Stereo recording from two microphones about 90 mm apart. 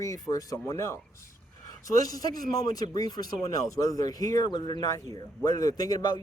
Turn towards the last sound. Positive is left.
turn(degrees=45)  # may be behind; listen again after turning